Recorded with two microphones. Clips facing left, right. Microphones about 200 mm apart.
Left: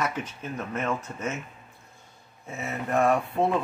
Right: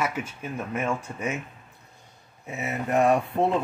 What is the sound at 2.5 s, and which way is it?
Speech, 15° right (ahead or behind).